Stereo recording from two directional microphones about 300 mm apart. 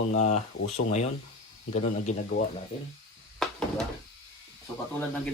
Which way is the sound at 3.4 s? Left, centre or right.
Centre.